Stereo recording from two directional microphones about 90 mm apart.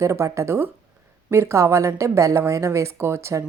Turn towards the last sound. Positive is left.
turn(degrees=-30)  # may be behind; listen again after turning